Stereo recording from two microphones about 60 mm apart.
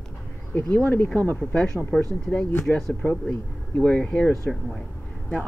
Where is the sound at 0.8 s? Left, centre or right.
Left.